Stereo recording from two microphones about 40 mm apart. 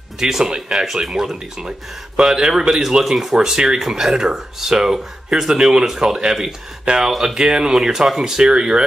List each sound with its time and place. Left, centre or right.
0.2 s speech: centre